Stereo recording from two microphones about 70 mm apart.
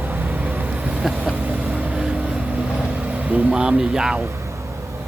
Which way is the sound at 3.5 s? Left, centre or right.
Centre.